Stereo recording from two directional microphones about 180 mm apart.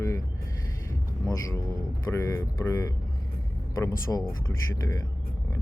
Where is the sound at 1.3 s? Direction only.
20° left (ahead or behind).